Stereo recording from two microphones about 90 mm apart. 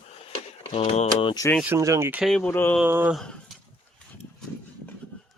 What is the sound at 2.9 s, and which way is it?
Speech, 25° right (ahead or behind).